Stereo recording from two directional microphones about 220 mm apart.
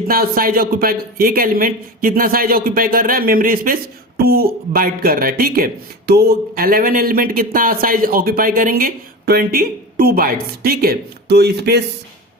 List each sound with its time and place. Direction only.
0.1 s speech: 40° right (ahead or behind)